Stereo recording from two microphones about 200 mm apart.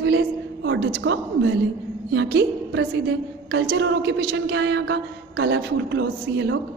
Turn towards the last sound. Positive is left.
turn(degrees=-65)  # may be behind; listen again after turning